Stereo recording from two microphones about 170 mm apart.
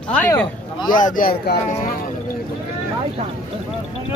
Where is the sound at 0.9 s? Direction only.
50° left (ahead or behind).